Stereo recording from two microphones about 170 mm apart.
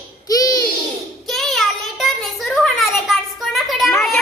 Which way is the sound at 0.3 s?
20° left (ahead or behind).